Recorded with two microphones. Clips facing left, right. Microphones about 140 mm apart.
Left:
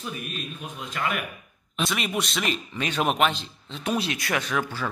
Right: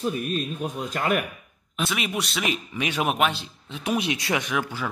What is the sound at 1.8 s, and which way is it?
Speech, centre (ahead or behind).